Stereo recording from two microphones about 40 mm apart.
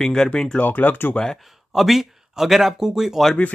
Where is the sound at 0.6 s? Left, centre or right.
Left.